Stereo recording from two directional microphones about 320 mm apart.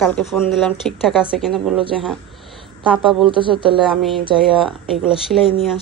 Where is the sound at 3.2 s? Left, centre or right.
Centre.